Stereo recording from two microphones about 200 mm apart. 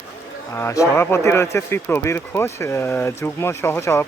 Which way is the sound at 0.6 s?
15° left (ahead or behind).